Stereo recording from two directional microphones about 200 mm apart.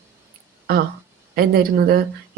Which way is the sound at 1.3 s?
50° right (ahead or behind).